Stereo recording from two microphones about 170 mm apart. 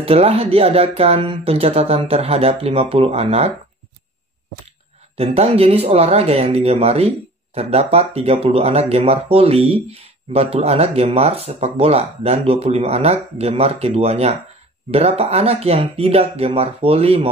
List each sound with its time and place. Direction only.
0.0 s speech: 35° right (ahead or behind)
4.6 s speech: 35° right (ahead or behind)